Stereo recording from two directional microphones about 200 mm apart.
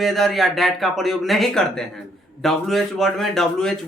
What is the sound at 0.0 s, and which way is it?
Speech, centre (ahead or behind).